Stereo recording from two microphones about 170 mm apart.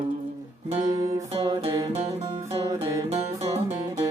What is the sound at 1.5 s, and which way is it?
Music, 20° right (ahead or behind).